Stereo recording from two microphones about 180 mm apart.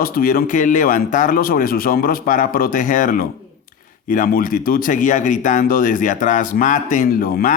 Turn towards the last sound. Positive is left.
turn(degrees=55)  # may be behind; listen again after turning